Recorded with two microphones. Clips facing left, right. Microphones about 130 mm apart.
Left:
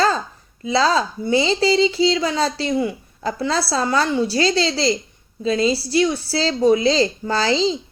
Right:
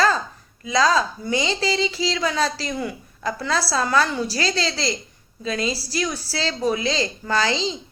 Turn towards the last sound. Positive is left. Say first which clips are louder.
# left 4 dB
turn(degrees=30)  # may be behind; listen again after turning